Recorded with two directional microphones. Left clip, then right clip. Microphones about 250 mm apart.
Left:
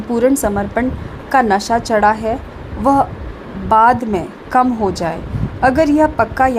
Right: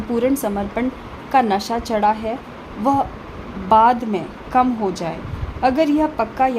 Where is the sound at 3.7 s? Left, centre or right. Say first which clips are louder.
Left 3 dB; centre.